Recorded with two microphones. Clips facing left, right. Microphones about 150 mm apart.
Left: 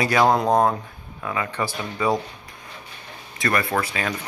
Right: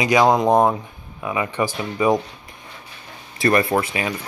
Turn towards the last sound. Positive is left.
turn(degrees=-25)  # may be behind; listen again after turning